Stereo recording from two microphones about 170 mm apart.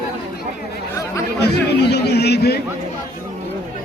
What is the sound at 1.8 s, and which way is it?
Speech, 75° left (ahead or behind).